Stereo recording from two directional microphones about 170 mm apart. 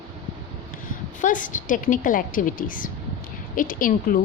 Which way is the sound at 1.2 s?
50° left (ahead or behind).